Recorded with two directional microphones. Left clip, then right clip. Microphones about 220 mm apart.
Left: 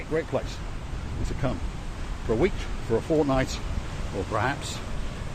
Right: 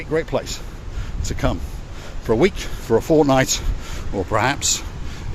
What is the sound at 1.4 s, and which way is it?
Speech, 60° right (ahead or behind).